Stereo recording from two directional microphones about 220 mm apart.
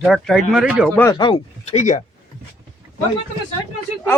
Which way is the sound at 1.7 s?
35° left (ahead or behind).